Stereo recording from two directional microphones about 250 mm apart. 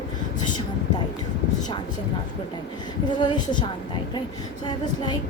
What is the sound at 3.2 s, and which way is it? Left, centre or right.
Speech, centre.